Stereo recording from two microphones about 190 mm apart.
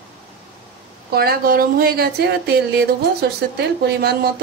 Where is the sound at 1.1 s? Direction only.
50° right (ahead or behind).